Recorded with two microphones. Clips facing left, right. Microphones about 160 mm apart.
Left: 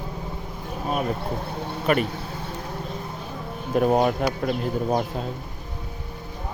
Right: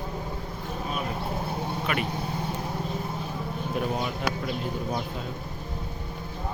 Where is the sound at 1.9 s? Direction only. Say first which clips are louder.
Left 9 dB; 45° left (ahead or behind).